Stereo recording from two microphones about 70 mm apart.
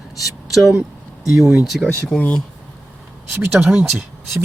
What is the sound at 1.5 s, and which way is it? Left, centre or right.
Speech, centre.